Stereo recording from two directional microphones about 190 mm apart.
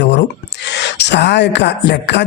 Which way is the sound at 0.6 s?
65° left (ahead or behind).